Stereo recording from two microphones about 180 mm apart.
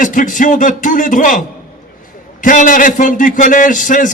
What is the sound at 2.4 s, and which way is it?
A man's voice, 45° left (ahead or behind).